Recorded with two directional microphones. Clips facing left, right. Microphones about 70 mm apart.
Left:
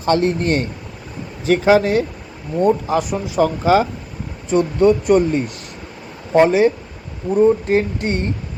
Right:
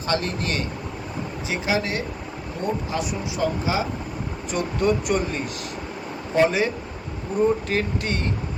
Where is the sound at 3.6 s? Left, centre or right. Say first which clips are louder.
Left 10 dB; left.